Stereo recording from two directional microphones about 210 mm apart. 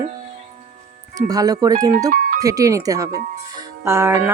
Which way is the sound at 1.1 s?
15° right (ahead or behind).